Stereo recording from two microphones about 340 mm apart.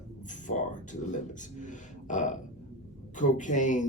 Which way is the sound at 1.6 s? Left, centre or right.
Left.